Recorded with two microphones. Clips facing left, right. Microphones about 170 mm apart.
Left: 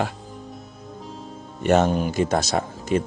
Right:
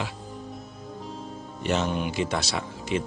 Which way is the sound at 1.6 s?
50° left (ahead or behind).